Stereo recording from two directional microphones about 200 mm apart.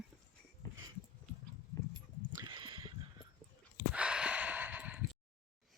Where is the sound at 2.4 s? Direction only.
25° right (ahead or behind).